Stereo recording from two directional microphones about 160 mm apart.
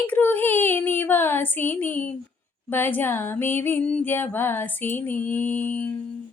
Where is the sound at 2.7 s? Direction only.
10° left (ahead or behind).